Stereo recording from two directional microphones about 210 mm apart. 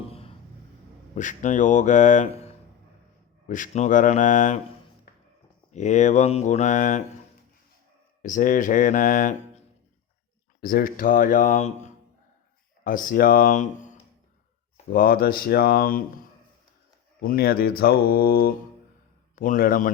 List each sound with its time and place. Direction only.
0.1 s a sound: 25° left (ahead or behind)
1.1 s speech: 35° left (ahead or behind)
5.7 s speech: 35° left (ahead or behind)
8.2 s speech: 40° left (ahead or behind)
10.6 s speech: 45° left (ahead or behind)